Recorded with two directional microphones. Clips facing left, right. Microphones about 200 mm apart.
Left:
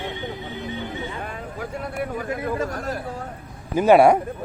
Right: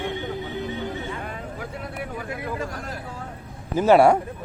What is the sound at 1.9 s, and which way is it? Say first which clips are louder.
A man's voice: left 6 dB; 45° left (ahead or behind).